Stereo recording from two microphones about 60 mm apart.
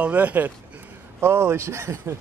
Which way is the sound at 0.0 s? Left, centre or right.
Right.